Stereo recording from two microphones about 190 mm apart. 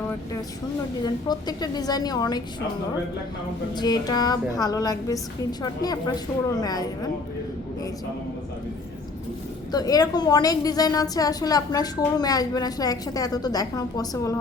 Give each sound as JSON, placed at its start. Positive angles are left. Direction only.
{"t": 1.0, "sound": "a woman's voice", "side_deg": 20}
{"t": 3.8, "sound": "a woman's voice", "side_deg": 20}
{"t": 9.7, "sound": "a woman's voice", "side_deg": 20}